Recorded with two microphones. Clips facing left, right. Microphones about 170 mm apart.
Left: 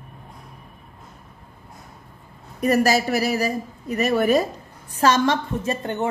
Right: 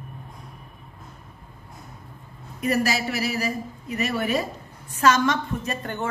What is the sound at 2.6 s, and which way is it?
A woman's voice, 40° left (ahead or behind).